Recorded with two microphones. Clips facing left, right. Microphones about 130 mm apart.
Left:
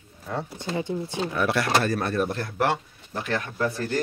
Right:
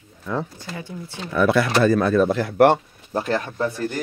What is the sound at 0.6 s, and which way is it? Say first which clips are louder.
Speech: left 6 dB; 25° left (ahead or behind).